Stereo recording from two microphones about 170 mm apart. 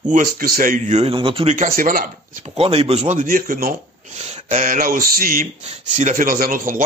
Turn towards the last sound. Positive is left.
turn(degrees=-55)  # may be behind; listen again after turning